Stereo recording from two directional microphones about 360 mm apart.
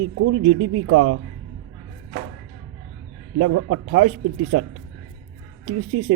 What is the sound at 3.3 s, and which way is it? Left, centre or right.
Speech, right.